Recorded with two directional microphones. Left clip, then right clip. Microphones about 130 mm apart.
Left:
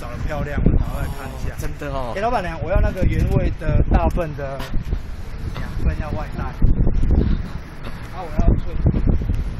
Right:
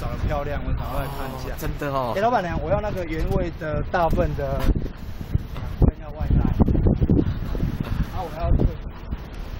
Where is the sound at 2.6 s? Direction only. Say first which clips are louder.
Left 1 dB; 30° left (ahead or behind).